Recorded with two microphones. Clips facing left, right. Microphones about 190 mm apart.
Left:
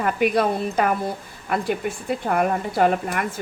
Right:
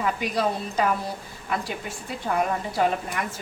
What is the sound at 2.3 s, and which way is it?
Speech, 60° left (ahead or behind).